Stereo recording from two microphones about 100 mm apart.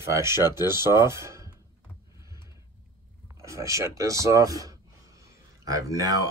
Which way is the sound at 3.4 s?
30° right (ahead or behind).